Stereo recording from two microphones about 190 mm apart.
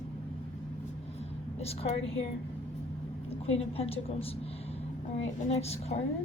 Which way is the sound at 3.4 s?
30° left (ahead or behind).